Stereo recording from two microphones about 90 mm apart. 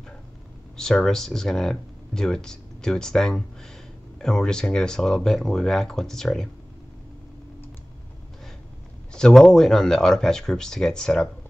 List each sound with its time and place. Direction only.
0.7 s speech: 5° left (ahead or behind)
9.1 s speech: 5° left (ahead or behind)